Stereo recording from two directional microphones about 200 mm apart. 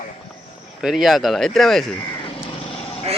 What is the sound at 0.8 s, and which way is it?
Speech, centre (ahead or behind).